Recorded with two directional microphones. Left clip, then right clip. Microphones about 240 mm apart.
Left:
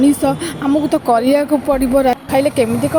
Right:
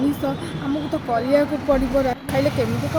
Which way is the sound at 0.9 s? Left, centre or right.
Left.